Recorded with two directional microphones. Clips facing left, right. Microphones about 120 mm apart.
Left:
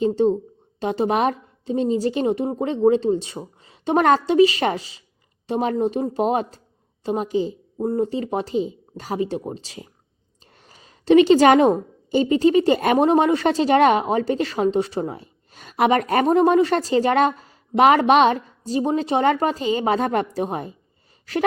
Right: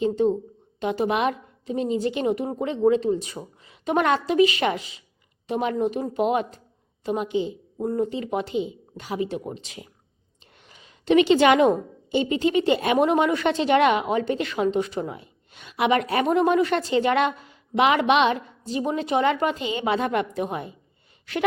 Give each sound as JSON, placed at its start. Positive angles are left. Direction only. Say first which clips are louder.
{"t": 0.0, "sound": "a woman's voice", "louder": "left 3 dB", "side_deg": 35}